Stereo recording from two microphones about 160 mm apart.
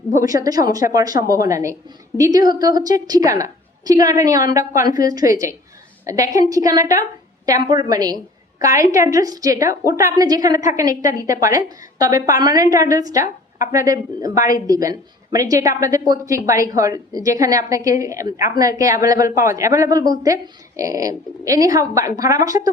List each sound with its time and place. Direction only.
0.2 s speech: 20° right (ahead or behind)